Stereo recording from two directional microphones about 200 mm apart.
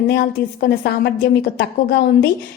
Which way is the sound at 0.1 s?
50° left (ahead or behind).